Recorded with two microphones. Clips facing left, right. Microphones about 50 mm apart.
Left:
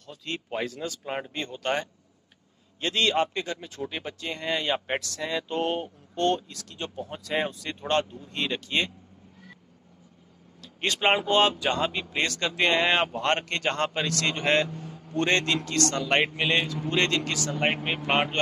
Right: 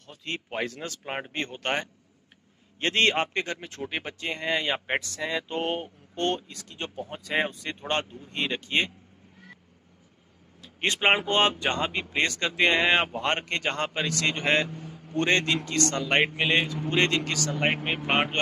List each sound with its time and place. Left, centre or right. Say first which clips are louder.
0.0 s speech: even; right
1.3 s a man's voice: even; right
5.0 s speech: even; centre
5.5 s speech: left 2 dB; right
10.6 s speech: right 1 dB; right
11.2 s speech: left 1 dB; right
17.3 s speech: even; centre